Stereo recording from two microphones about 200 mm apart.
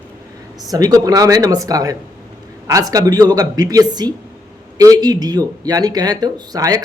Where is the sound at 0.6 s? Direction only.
20° right (ahead or behind).